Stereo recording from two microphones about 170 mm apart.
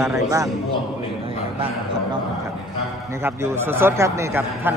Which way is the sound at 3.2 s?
15° right (ahead or behind).